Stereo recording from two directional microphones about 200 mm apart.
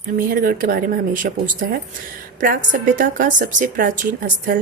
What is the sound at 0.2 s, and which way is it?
A woman's voice, 45° right (ahead or behind).